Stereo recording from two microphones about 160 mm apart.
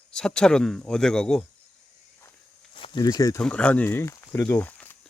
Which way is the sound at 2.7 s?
30° left (ahead or behind).